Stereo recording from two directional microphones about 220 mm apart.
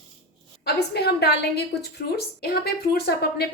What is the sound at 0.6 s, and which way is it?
A woman's voice, 45° left (ahead or behind).